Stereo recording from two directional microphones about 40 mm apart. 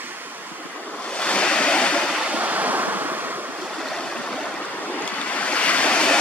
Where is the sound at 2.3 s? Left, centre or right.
Right.